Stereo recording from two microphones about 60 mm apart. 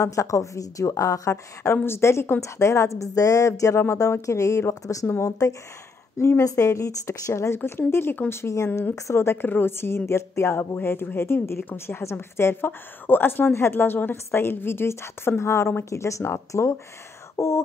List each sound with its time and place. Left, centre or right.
0.0 s a woman's voice: left
6.1 s a woman's voice: left